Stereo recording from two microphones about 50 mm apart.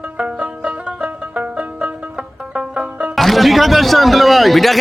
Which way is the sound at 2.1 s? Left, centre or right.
Centre.